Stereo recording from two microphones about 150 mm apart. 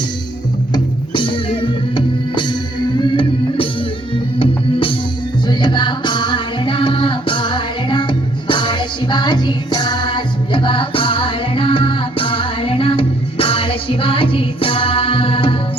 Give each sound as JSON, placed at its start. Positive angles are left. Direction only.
{"t": 0.7, "sound": "music", "side_deg": 35}